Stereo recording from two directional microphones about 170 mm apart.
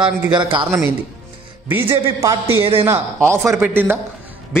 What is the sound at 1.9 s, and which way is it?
A man's voice, 15° right (ahead or behind).